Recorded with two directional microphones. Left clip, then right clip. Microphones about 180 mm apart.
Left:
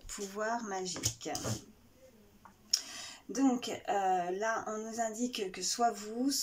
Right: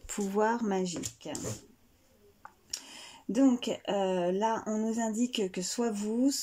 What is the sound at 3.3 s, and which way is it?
Speech, 45° right (ahead or behind).